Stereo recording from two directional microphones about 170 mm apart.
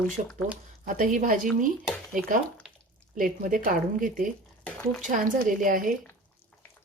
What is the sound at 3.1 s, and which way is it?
A woman's voice, 50° right (ahead or behind).